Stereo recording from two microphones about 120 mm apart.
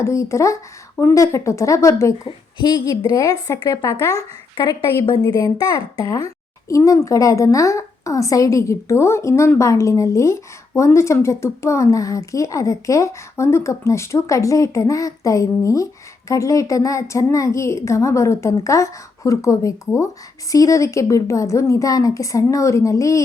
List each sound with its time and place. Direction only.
0.0 s speech: 25° left (ahead or behind)
2.2 s a woman's voice: 40° left (ahead or behind)
2.9 s a woman's voice: 30° left (ahead or behind)